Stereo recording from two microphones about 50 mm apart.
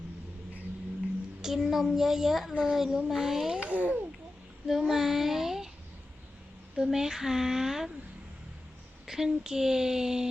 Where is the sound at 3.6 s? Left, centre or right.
Right.